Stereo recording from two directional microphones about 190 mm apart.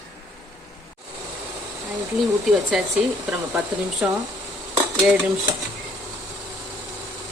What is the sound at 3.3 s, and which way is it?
Speech, 5° right (ahead or behind).